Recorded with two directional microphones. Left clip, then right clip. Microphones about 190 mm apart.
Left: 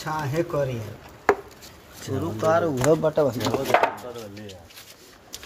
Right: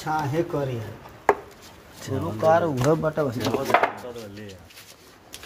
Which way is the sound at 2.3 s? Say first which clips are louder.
Right 2 dB; 25° right (ahead or behind).